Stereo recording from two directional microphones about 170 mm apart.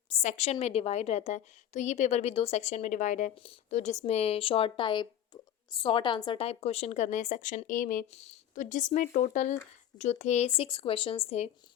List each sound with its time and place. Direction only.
0.1 s a woman's voice: 40° left (ahead or behind)
8.1 s a woman's voice: 40° left (ahead or behind)